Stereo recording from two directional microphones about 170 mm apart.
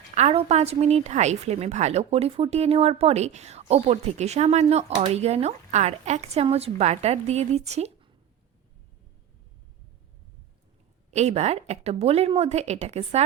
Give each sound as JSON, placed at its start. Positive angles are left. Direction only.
{"t": 0.1, "sound": "a woman's voice", "side_deg": -40}
{"t": 11.1, "sound": "a woman's voice", "side_deg": -40}